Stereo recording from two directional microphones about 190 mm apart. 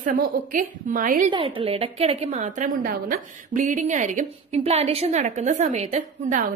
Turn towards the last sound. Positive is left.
turn(degrees=-40)  # may be behind; listen again after turning